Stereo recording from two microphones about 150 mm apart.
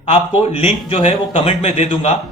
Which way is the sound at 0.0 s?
40° left (ahead or behind).